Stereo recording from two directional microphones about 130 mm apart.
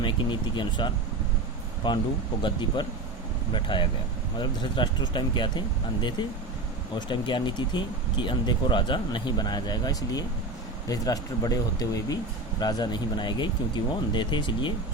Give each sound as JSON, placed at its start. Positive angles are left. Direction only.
{"t": 0.0, "sound": "speech", "side_deg": 35}